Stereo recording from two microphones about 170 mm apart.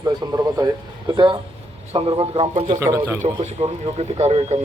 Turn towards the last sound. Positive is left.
turn(degrees=-40)  # may be behind; listen again after turning